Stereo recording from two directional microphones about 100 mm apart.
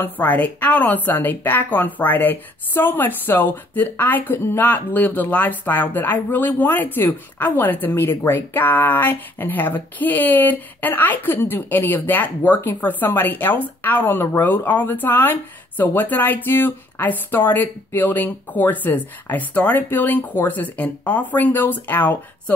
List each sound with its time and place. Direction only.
0.0 s a woman's voice: 15° left (ahead or behind)